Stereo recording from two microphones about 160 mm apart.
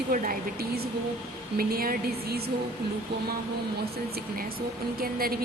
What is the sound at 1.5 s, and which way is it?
Speech, 65° right (ahead or behind).